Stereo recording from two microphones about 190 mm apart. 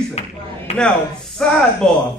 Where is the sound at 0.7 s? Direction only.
35° left (ahead or behind).